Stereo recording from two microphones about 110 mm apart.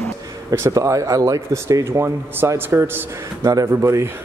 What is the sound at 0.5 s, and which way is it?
Speech, 25° right (ahead or behind).